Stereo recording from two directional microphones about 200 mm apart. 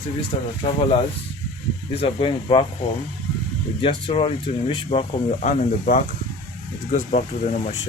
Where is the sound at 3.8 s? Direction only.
25° left (ahead or behind).